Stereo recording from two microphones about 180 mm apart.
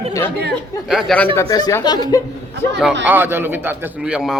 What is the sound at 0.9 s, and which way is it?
Speech, centre (ahead or behind).